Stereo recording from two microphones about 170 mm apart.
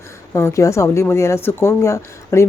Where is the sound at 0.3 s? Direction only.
15° left (ahead or behind).